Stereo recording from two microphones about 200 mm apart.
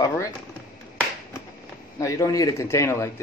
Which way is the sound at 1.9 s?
15° left (ahead or behind).